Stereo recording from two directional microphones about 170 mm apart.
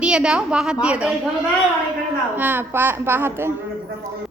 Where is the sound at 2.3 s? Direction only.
10° right (ahead or behind).